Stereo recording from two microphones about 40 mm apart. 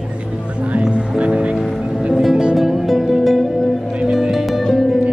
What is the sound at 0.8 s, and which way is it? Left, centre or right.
Music, right.